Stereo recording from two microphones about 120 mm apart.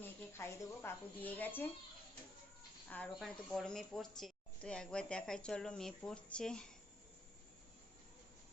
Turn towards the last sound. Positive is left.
turn(degrees=5)  # may be behind; listen again after turning